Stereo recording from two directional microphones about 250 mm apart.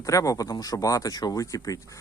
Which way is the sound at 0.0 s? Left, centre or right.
Centre.